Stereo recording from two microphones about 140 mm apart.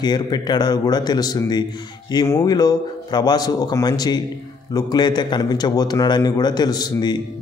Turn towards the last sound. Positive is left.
turn(degrees=30)  # may be behind; listen again after turning